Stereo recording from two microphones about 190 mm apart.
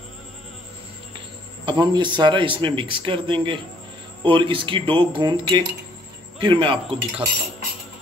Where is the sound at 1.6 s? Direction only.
20° right (ahead or behind).